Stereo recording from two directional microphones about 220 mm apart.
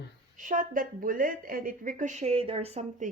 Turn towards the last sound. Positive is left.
turn(degrees=-30)  # may be behind; listen again after turning